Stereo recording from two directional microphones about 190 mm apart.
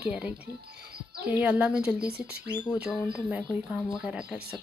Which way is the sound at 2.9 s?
15° left (ahead or behind).